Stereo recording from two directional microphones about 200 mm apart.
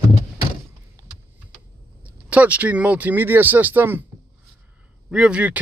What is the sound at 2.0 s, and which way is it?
Speech, 5° right (ahead or behind).